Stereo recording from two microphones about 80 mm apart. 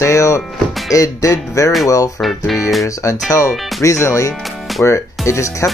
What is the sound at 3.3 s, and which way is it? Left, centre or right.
Speech, left.